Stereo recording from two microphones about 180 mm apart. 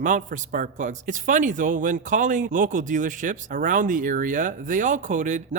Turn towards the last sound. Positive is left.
turn(degrees=-45)  # may be behind; listen again after turning